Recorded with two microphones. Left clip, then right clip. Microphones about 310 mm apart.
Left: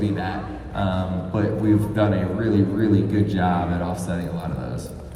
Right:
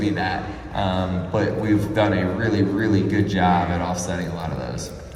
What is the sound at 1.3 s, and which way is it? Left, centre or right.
Speech, right.